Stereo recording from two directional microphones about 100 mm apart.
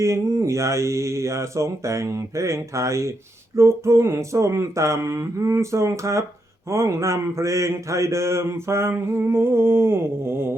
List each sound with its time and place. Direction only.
0.0 s speech: 30° right (ahead or behind)